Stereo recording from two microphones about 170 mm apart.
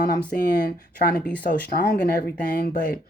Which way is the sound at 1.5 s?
65° left (ahead or behind).